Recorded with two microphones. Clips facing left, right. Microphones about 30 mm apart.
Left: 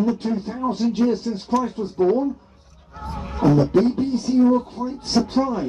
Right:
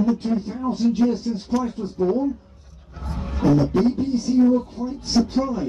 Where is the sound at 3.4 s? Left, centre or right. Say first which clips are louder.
Left 2 dB; left.